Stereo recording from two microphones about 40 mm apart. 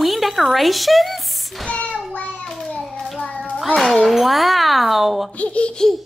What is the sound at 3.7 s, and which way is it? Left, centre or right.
Speech, centre.